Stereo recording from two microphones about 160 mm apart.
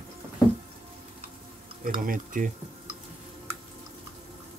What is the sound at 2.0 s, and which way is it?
Speech, 60° right (ahead or behind).